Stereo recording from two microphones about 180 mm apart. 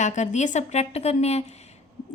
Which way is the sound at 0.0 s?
40° left (ahead or behind).